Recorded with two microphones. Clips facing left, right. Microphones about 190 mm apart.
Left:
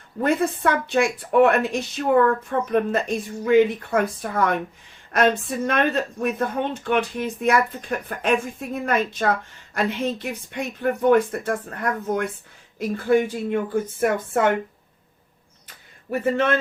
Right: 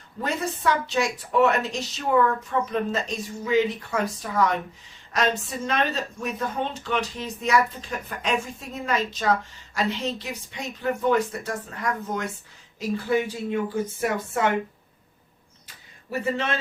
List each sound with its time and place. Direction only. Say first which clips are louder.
0.2 s speech: left 7 dB; 55° left (ahead or behind)